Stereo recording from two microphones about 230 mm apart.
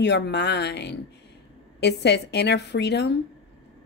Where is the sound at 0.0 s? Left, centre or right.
Left.